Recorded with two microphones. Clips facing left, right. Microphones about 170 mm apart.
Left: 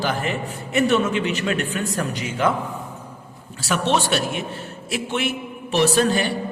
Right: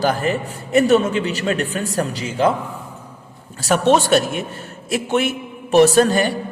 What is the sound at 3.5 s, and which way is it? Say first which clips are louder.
A man's voice: right 6 dB; 45° right (ahead or behind).